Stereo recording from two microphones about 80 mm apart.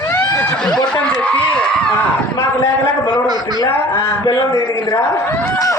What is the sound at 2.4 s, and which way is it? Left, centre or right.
Speech, left.